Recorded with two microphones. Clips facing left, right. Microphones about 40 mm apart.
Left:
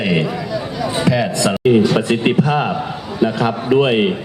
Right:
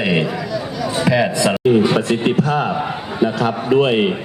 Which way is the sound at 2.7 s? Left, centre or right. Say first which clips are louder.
Even; centre.